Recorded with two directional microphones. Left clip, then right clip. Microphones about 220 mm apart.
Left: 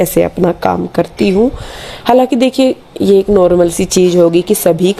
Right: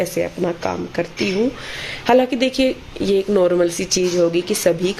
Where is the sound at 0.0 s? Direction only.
40° left (ahead or behind).